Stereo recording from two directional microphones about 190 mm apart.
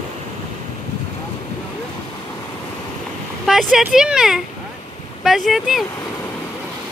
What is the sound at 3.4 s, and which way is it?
Speech, centre (ahead or behind).